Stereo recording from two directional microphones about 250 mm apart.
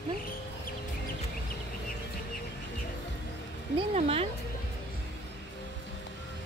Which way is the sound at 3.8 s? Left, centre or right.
Right.